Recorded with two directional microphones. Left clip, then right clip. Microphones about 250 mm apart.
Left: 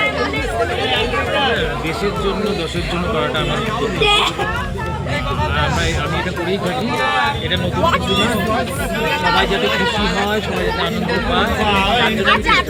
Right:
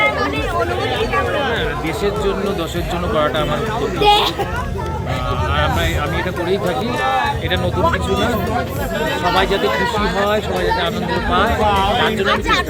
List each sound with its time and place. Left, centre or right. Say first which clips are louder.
4.0 s speech: right 2 dB; left
9.5 s speech: even; left
10.2 s speech: right 2 dB; centre
11.6 s speech: even; left